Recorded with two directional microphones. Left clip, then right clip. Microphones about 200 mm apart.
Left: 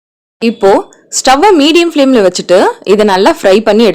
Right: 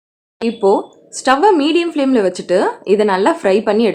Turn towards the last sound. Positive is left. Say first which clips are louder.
# left 7 dB
turn(degrees=45)  # may be behind; listen again after turning